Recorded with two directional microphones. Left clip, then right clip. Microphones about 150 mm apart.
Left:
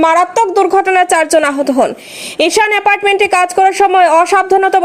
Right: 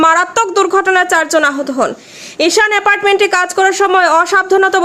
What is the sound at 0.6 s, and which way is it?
Speech, 15° left (ahead or behind).